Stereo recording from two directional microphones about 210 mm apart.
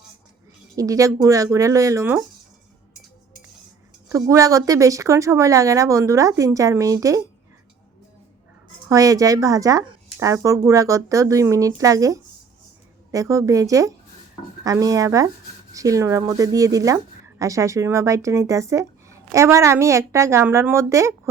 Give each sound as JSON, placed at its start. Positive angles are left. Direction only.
{"t": 0.8, "sound": "speech", "side_deg": -15}
{"t": 4.1, "sound": "speech", "side_deg": -15}
{"t": 8.9, "sound": "speech", "side_deg": -15}